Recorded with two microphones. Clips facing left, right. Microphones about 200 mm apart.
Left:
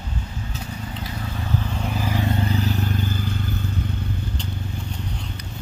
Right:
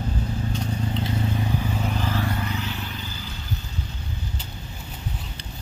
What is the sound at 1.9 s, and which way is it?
Vehicle, 15° left (ahead or behind).